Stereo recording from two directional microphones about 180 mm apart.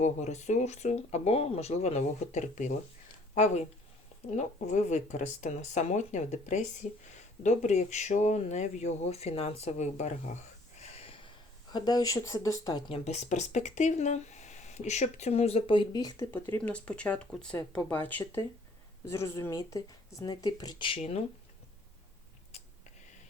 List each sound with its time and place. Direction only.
0.0 s speech: 40° left (ahead or behind)
10.8 s a sound: 30° left (ahead or behind)
12.9 s speech: 40° left (ahead or behind)